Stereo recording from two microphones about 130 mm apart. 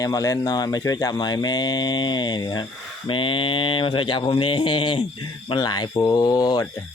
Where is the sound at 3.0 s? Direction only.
40° left (ahead or behind).